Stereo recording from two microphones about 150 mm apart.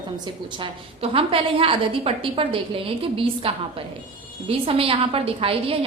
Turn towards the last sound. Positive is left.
turn(degrees=-40)  # may be behind; listen again after turning